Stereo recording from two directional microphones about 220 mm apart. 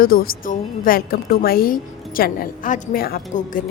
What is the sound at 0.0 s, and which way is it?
A woman's voice, 40° left (ahead or behind).